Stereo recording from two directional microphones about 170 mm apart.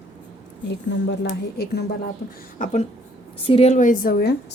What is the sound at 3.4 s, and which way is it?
Speech, 35° left (ahead or behind).